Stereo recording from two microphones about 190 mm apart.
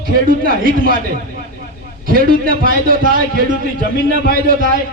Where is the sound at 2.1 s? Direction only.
50° right (ahead or behind).